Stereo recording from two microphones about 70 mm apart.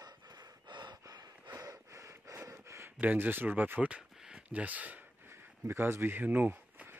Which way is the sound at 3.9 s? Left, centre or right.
Centre.